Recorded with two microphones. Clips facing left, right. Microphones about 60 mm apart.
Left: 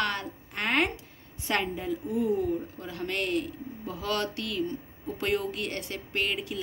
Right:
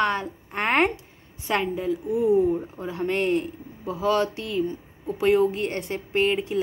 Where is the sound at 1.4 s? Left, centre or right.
Centre; by 3.5 s right.